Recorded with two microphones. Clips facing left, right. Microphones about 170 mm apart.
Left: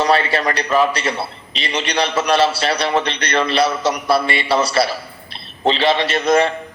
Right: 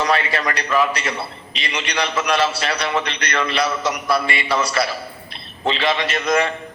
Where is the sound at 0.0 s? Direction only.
30° left (ahead or behind).